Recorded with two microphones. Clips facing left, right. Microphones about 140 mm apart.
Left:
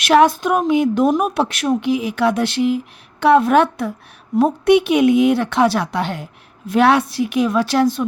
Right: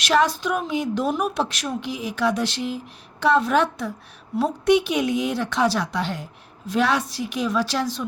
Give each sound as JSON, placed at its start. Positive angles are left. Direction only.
{"t": 0.0, "sound": "a woman's voice", "side_deg": 55}